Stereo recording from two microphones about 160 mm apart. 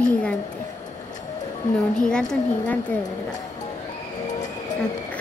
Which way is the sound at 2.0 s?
5° left (ahead or behind).